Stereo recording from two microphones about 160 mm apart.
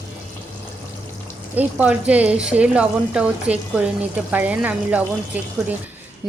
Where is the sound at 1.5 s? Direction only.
10° right (ahead or behind).